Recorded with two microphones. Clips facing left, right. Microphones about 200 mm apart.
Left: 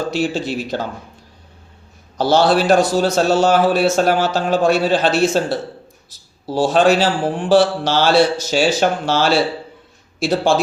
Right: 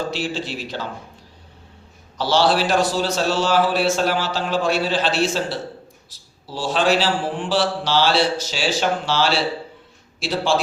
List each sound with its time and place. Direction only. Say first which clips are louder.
0.1 s a man's voice: left 6 dB; 45° left (ahead or behind)
2.1 s a man's voice: left 4 dB; 45° left (ahead or behind)